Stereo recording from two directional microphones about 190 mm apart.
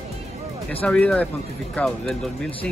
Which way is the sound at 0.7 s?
5° left (ahead or behind).